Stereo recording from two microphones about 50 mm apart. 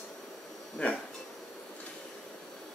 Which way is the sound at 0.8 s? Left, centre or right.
Left.